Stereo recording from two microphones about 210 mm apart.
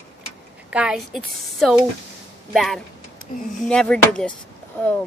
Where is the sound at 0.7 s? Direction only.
5° right (ahead or behind).